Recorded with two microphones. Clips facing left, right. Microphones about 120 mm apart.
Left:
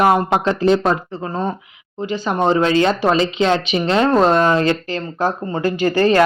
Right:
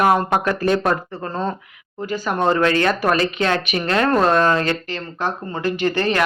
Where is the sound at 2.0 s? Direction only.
25° left (ahead or behind).